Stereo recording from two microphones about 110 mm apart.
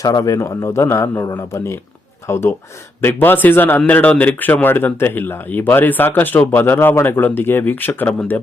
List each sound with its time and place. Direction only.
0.0 s a man's voice: 30° left (ahead or behind)